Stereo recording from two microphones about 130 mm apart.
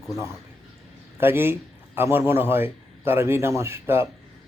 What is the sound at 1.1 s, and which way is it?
Speech, 15° right (ahead or behind).